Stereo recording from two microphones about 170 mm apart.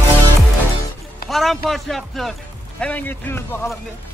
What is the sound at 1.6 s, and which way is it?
A man's voice, centre (ahead or behind).